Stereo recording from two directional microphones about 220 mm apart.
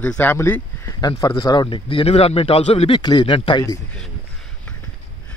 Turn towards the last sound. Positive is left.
turn(degrees=20)  # may be behind; listen again after turning